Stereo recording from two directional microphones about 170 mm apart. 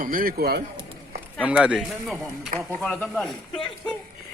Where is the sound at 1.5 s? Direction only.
5° right (ahead or behind).